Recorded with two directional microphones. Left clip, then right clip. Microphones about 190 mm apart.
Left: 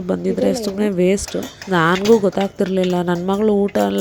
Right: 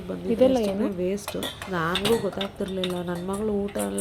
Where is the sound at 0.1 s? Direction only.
45° left (ahead or behind).